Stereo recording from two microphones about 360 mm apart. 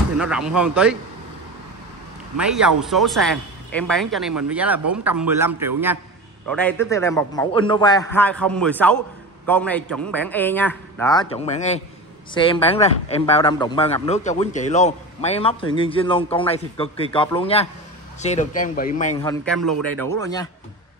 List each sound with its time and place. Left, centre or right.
0.2 s a man's voice: centre
2.3 s a man's voice: centre
6.5 s a man's voice: centre; by 19.1 s left
19.2 s a man's voice: centre